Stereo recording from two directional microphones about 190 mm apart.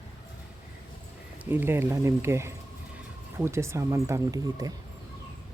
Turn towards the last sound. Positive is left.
turn(degrees=-20)  # may be behind; listen again after turning